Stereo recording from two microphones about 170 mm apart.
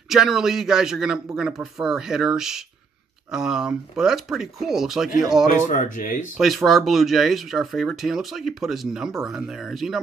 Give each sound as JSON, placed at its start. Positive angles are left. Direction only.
{"t": 0.1, "sound": "speech", "side_deg": 0}
{"t": 5.7, "sound": "speech", "side_deg": 50}
{"t": 6.3, "sound": "speech", "side_deg": 0}